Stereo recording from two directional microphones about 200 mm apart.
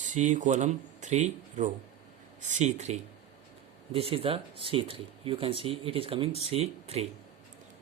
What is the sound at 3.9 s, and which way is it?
Speech, 30° right (ahead or behind).